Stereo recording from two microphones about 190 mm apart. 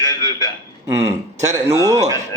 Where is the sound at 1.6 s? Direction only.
15° right (ahead or behind).